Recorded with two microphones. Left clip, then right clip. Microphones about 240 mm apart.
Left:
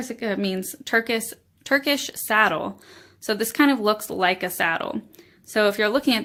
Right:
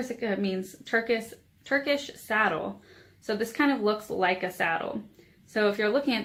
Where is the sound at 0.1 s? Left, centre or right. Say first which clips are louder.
Left 6 dB; left.